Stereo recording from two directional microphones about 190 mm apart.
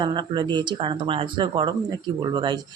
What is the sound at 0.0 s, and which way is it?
Speech, 25° right (ahead or behind).